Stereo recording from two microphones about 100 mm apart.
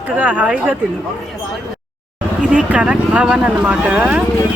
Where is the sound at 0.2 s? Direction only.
10° right (ahead or behind).